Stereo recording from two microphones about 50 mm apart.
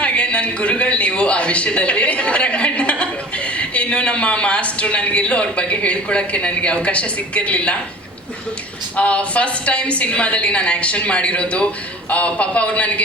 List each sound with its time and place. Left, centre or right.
0.0 s a man's voice: left
9.0 s a woman's voice: left